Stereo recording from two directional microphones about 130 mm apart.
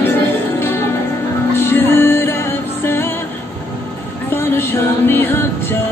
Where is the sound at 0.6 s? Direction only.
20° left (ahead or behind).